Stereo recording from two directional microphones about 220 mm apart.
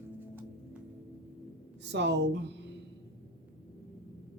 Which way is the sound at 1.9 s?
55° right (ahead or behind).